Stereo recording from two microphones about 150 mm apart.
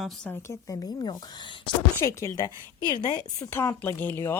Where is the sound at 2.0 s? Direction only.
20° left (ahead or behind).